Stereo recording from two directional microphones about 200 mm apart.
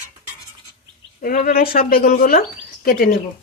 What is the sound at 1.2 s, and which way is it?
Speech, 50° left (ahead or behind).